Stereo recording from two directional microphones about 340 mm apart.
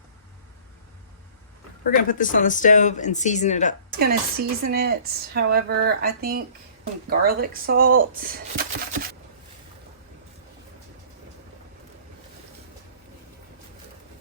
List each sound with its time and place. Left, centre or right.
2.0 s speech: left
3.9 s speech: right